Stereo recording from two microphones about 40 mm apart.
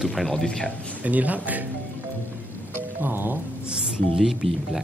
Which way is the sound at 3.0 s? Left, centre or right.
Right.